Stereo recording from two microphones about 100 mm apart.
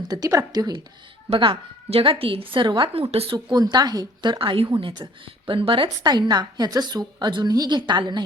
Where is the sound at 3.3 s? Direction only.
45° right (ahead or behind); by 4.7 s 60° right (ahead or behind).